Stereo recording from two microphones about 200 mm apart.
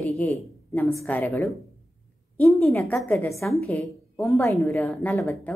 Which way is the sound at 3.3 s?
Centre (ahead or behind).